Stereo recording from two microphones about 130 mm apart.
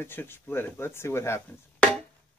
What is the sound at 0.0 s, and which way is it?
Speech, 15° left (ahead or behind).